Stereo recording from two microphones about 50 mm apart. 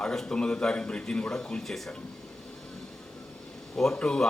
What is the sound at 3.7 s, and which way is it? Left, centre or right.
Speech, centre.